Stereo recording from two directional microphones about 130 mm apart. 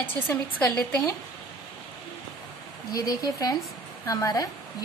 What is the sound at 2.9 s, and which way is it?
Speech, 30° left (ahead or behind).